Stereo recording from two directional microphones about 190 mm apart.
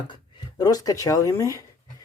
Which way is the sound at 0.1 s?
20° left (ahead or behind).